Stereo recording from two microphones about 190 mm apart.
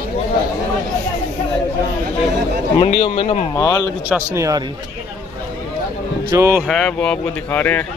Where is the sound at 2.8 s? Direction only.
30° left (ahead or behind).